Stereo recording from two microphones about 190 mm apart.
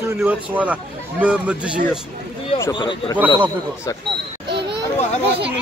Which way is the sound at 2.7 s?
25° left (ahead or behind).